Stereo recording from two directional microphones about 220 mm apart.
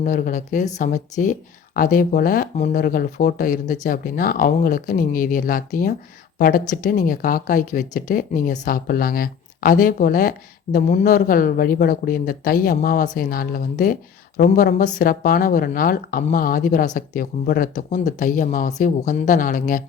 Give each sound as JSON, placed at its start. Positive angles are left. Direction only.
{"t": 0.0, "sound": "speech", "side_deg": 35}